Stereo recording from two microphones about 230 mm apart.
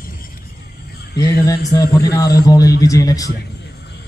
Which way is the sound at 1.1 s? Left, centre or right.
Left.